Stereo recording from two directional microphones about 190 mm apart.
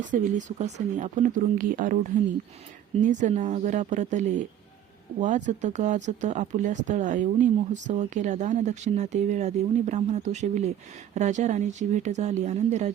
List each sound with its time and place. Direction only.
0.1 s speech: 40° right (ahead or behind)
3.0 s speech: 40° right (ahead or behind)